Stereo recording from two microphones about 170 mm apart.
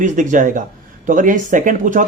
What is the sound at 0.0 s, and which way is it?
Speech, 50° right (ahead or behind).